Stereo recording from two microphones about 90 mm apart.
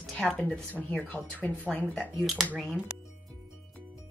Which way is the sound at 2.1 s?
Centre (ahead or behind).